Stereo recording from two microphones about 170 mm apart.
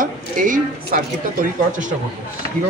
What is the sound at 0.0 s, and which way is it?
A woman's voice, 55° right (ahead or behind).